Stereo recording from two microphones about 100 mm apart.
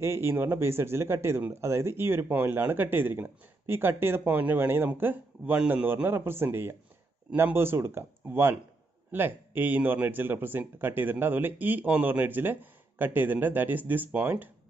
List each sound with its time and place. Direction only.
0.0 s speech: 25° right (ahead or behind)